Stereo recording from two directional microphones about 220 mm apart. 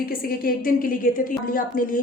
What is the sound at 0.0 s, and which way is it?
A woman's voice, 40° left (ahead or behind).